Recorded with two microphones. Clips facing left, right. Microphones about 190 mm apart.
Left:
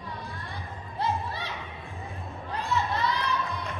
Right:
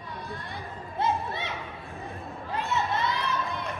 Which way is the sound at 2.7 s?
20° right (ahead or behind).